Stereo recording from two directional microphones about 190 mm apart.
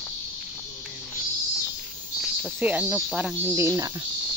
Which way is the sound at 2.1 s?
5° right (ahead or behind).